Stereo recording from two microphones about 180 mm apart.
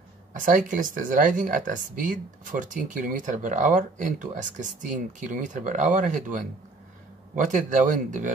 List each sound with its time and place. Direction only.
0.3 s speech: 45° right (ahead or behind)